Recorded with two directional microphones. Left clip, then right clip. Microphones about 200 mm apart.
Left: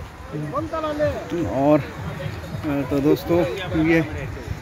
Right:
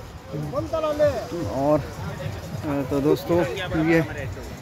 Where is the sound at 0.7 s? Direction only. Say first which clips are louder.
Right 3 dB; 50° right (ahead or behind).